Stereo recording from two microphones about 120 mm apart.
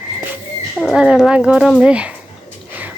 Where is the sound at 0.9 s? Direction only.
5° right (ahead or behind).